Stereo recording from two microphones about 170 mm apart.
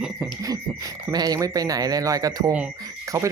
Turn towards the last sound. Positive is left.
turn(degrees=-20)  # may be behind; listen again after turning